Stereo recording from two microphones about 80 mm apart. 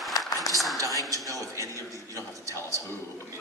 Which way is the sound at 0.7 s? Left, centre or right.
Right.